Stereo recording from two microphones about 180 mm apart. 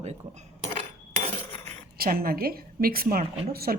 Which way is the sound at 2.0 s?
55° right (ahead or behind).